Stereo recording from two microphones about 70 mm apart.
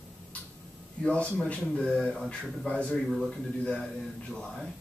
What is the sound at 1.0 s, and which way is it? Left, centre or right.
Speech, centre.